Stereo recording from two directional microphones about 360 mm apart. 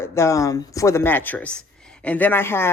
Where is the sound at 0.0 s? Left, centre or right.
Centre.